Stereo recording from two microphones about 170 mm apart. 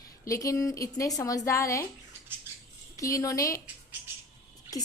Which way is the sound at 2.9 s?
20° left (ahead or behind).